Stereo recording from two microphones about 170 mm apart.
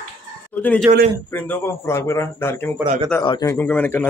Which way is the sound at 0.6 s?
10° left (ahead or behind).